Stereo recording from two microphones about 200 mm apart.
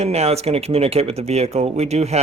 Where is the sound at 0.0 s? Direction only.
30° right (ahead or behind).